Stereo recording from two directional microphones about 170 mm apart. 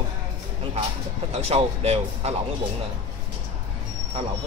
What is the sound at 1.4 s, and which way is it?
Speech, 35° right (ahead or behind).